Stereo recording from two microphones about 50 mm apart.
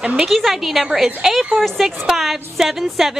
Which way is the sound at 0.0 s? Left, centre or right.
Centre.